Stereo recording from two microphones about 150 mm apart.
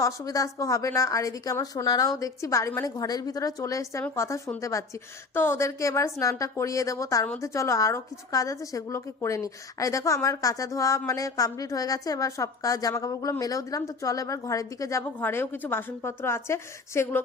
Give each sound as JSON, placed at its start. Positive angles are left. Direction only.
{"t": 0.0, "sound": "a woman's voice", "side_deg": 20}